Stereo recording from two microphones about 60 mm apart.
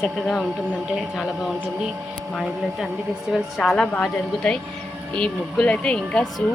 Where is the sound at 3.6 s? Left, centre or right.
Centre.